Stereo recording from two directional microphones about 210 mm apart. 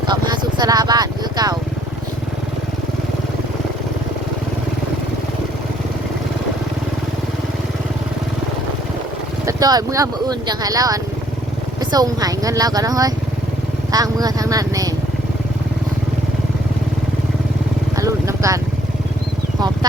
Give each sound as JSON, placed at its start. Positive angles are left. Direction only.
{"t": 0.1, "sound": "vehicle", "side_deg": -20}
{"t": 9.5, "sound": "speech", "side_deg": -20}
{"t": 17.9, "sound": "vehicle", "side_deg": -15}